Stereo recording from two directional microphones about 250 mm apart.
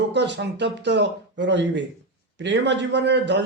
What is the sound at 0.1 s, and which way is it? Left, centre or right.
Speech, right.